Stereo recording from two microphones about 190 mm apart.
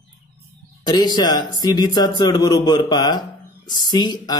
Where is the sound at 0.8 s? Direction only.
20° left (ahead or behind).